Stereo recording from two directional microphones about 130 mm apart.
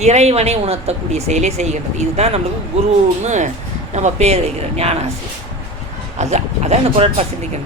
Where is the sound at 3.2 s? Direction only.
65° right (ahead or behind).